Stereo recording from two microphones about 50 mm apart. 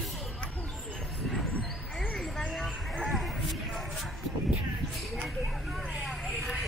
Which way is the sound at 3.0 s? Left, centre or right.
Centre.